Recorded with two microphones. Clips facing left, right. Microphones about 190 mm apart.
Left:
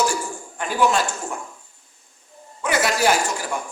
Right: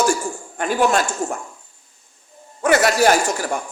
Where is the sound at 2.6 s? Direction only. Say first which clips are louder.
Right 5 dB; 45° right (ahead or behind).